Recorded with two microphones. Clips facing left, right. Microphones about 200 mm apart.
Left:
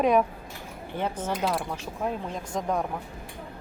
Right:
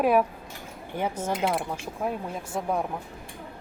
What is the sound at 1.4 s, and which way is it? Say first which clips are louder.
Speech: right 1 dB; 20° right (ahead or behind).